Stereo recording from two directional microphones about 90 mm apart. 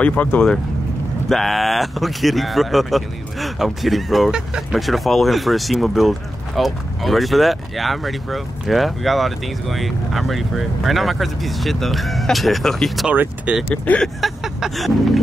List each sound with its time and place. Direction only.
0.0 s speech: 15° left (ahead or behind)
1.3 s speech: centre (ahead or behind)
13.1 s speech: 20° right (ahead or behind)
13.8 s speech: 10° left (ahead or behind)
14.2 s speech: centre (ahead or behind)